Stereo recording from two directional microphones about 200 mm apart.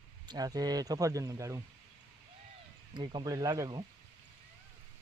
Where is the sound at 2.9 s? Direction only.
20° right (ahead or behind).